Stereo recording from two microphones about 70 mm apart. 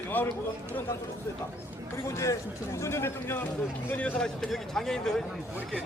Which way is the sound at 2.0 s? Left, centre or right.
Left.